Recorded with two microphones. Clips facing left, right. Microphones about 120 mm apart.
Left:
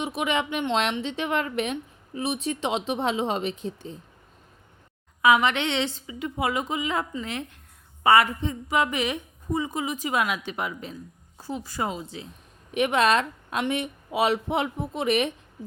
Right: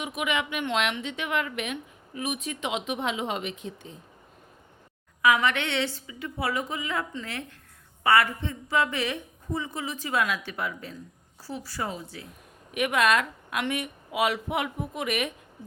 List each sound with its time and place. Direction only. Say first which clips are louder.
0.0 s a woman's voice: left 3 dB; 30° left (ahead or behind)
5.2 s a woman's voice: left 3 dB; 20° left (ahead or behind)